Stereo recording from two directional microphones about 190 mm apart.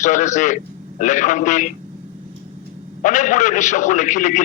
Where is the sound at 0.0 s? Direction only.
40° left (ahead or behind).